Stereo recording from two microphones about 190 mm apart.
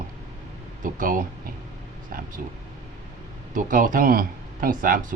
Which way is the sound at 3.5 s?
45° right (ahead or behind).